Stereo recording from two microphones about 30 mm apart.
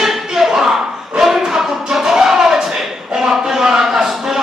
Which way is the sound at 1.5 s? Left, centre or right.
Centre.